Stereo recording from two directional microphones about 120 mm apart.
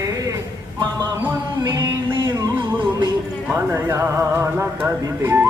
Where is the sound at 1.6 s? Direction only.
35° right (ahead or behind).